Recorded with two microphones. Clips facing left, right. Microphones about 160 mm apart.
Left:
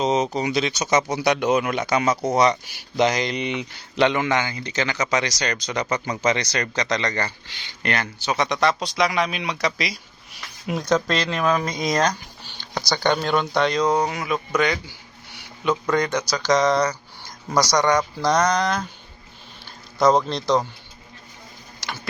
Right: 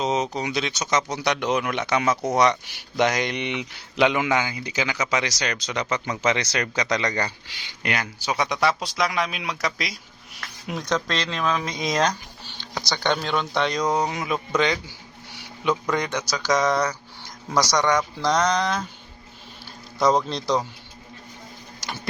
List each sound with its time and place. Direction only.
0.0 s speech: centre (ahead or behind)
13.7 s speech: 15° right (ahead or behind)
14.2 s speech: centre (ahead or behind)
15.9 s speech: 10° right (ahead or behind)
16.6 s speech: 15° left (ahead or behind)
17.5 s speech: centre (ahead or behind)
20.3 s speech: 5° right (ahead or behind)